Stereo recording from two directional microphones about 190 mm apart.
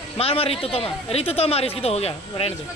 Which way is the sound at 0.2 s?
30° left (ahead or behind).